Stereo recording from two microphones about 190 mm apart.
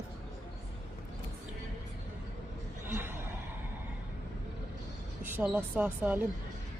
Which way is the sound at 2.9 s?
10° right (ahead or behind).